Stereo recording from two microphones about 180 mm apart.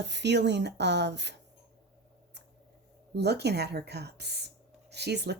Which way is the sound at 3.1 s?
65° right (ahead or behind).